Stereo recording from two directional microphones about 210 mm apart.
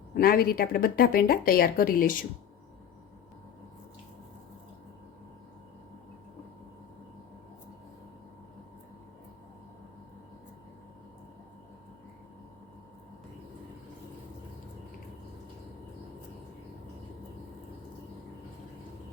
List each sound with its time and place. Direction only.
0.1 s speech: 45° left (ahead or behind)